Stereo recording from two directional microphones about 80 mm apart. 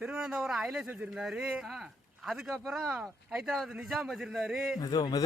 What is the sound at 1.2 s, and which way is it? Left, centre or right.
Speech, centre.